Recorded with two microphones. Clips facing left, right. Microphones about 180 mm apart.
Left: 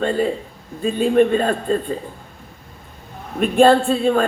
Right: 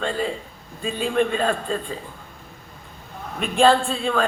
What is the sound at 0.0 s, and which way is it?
A man's voice, 45° left (ahead or behind).